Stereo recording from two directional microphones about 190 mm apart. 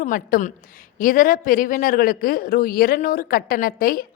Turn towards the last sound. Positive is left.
turn(degrees=50)  # may be behind; listen again after turning